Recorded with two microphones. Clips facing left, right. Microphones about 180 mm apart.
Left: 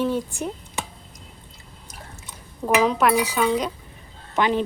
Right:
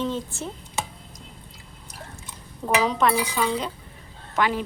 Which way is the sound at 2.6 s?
5° left (ahead or behind).